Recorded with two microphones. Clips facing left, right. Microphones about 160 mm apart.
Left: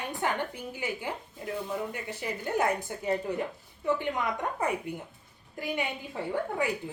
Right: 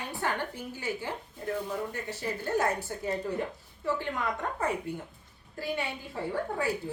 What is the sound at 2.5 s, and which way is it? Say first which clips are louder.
Speech: left 1 dB; 15° left (ahead or behind).